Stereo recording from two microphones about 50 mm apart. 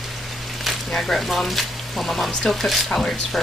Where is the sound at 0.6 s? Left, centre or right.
Centre.